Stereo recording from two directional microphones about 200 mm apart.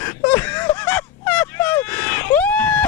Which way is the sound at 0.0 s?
10° left (ahead or behind).